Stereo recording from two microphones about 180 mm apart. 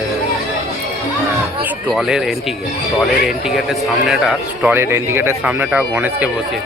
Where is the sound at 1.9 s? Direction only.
Centre (ahead or behind).